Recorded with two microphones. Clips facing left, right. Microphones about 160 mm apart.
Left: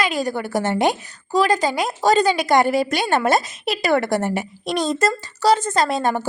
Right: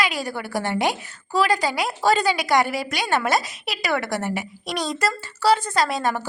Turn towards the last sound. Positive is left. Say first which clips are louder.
# left 3 dB
turn(degrees=25)  # may be behind; listen again after turning